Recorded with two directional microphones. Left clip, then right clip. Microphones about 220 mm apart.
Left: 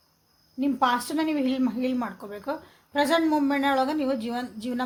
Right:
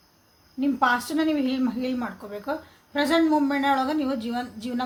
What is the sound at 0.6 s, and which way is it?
Speech, 50° left (ahead or behind).